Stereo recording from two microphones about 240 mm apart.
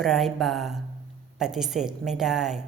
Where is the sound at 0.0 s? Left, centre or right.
Centre.